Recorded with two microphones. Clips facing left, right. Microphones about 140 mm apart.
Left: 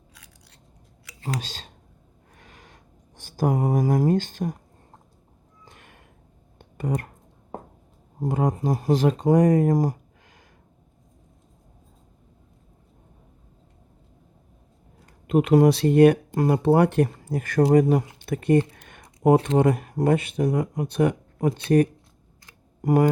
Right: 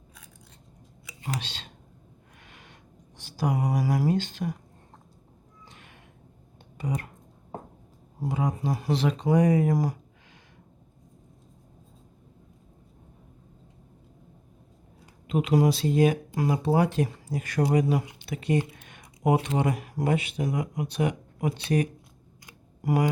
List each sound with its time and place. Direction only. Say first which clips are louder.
1.4 s speech: left 3 dB; 40° left (ahead or behind)
2.4 s a sound: left 3 dB; 40° left (ahead or behind)
3.2 s speech: left 4 dB; 45° left (ahead or behind)
5.6 s a sound: left 2 dB; 45° left (ahead or behind)
6.7 s speech: left 4 dB; 50° left (ahead or behind)
8.3 s speech: left 5 dB; 50° left (ahead or behind)
15.3 s speech: left 6 dB; 55° left (ahead or behind)
18.3 s a sound: left 7 dB; 50° left (ahead or behind)
19.2 s speech: left 6 dB; 45° left (ahead or behind)